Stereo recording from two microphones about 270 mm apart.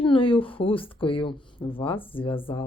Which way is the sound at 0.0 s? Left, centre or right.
Centre.